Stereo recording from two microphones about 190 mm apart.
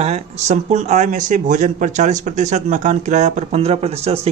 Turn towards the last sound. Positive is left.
turn(degrees=-30)  # may be behind; listen again after turning